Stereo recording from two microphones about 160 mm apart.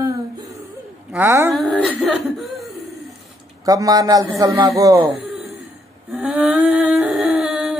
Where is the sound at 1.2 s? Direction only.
20° right (ahead or behind).